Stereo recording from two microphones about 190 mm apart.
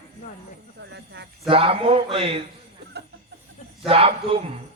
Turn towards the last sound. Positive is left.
turn(degrees=-30)  # may be behind; listen again after turning